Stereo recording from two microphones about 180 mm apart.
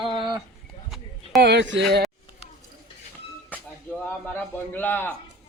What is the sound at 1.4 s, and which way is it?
Speech, 65° right (ahead or behind).